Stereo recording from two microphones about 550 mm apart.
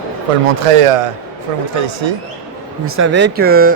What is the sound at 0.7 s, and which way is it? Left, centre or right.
Speech, right.